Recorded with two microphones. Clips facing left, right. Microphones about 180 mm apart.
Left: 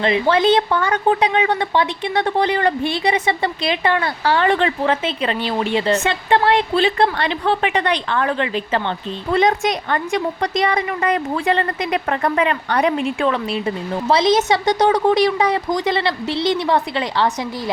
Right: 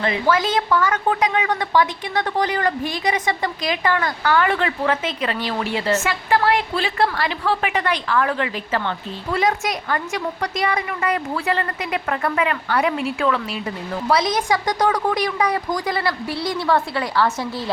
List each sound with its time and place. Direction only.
0.0 s a woman's voice: 25° left (ahead or behind)